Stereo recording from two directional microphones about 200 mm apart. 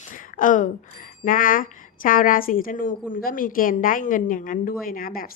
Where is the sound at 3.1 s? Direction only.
45° left (ahead or behind).